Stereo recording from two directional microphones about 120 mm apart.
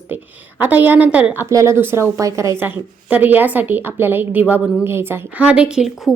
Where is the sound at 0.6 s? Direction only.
15° right (ahead or behind).